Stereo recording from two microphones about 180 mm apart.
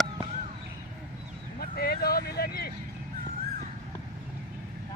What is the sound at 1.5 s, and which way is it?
Vehicle, 55° left (ahead or behind).